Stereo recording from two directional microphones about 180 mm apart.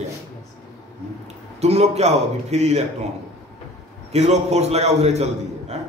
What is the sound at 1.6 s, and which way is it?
A man's voice, 35° right (ahead or behind).